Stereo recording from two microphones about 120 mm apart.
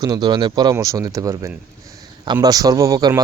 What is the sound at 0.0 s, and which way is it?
Speech, 35° right (ahead or behind).